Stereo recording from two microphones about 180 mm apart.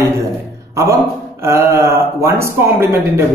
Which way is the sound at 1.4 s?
15° right (ahead or behind).